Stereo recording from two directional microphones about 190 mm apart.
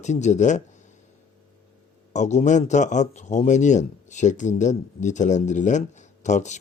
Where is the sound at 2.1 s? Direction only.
40° left (ahead or behind).